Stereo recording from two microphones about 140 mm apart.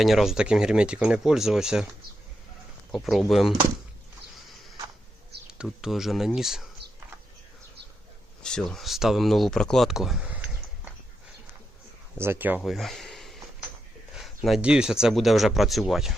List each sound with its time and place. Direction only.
0.0 s speech: centre (ahead or behind)
2.9 s speech: centre (ahead or behind)
5.5 s speech: 5° right (ahead or behind)
8.4 s speech: 5° left (ahead or behind)
12.1 s speech: 15° right (ahead or behind)
12.6 s a sound: centre (ahead or behind)
14.1 s speech: centre (ahead or behind)